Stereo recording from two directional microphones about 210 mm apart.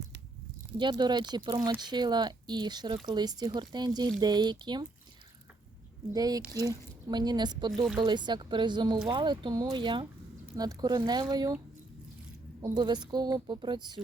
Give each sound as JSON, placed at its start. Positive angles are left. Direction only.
{"t": 0.8, "sound": "speech", "side_deg": -20}
{"t": 6.1, "sound": "speech", "side_deg": -20}
{"t": 12.6, "sound": "speech", "side_deg": -20}